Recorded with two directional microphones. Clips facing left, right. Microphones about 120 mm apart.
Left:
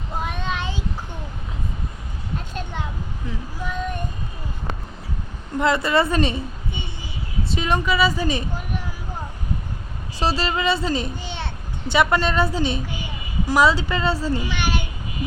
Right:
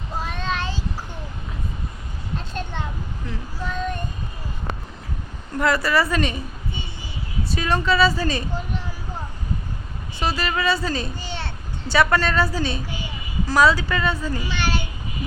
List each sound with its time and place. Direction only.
0.2 s child singing: 15° left (ahead or behind)
3.2 s female singing: 10° left (ahead or behind)
5.5 s a woman's voice: 20° left (ahead or behind)
7.4 s a woman's voice: 20° left (ahead or behind)
10.2 s a child's voice: 30° left (ahead or behind)
14.3 s a child's voice: 15° left (ahead or behind)